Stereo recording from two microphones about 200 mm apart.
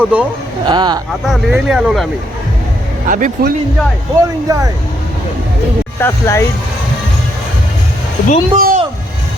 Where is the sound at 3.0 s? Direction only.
40° right (ahead or behind).